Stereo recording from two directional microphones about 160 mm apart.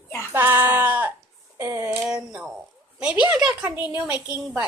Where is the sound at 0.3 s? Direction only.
15° right (ahead or behind).